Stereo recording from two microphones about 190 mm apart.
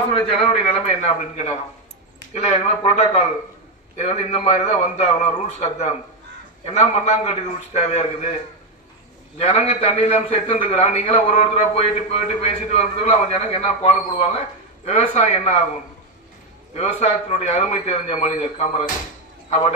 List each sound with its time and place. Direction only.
0.8 s a man's voice: 35° left (ahead or behind)
9.4 s a man's voice: 35° left (ahead or behind)
16.7 s a man's voice: 35° left (ahead or behind)